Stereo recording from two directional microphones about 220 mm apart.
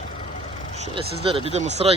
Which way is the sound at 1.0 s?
25° right (ahead or behind).